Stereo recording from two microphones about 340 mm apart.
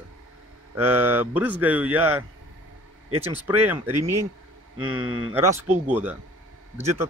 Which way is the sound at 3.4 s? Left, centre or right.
Centre.